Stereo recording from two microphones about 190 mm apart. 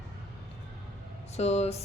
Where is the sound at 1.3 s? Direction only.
35° left (ahead or behind).